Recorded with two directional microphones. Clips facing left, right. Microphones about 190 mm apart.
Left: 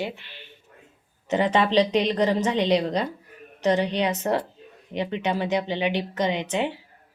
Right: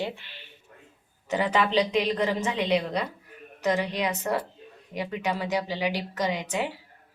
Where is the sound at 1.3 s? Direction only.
30° left (ahead or behind).